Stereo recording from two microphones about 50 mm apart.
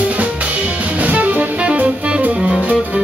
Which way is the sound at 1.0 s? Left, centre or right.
Right.